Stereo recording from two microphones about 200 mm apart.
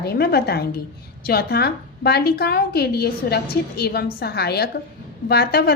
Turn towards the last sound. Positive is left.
turn(degrees=50)  # may be behind; listen again after turning